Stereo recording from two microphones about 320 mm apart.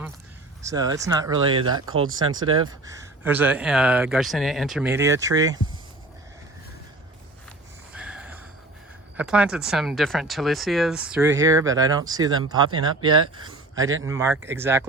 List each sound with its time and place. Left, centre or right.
0.7 s speech: centre
1.9 s speech: right
2.6 s speech: centre
7.9 s a sound: centre
9.1 s speech: centre
12.7 s speech: right
13.3 s speech: centre